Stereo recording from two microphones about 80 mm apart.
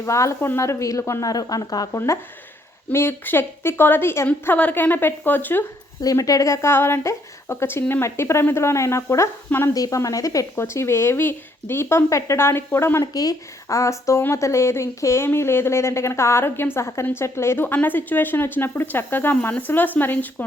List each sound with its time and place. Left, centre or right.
0.0 s speech: left
1.3 s speech: left
1.9 s speech: left
6.0 s speech: left
10.5 s speech: left
13.1 s speech: left